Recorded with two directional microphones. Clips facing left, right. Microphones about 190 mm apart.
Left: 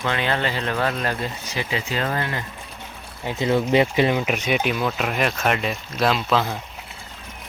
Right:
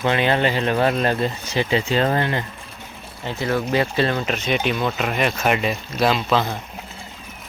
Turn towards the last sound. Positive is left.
turn(degrees=0)  # may be behind; listen again after turning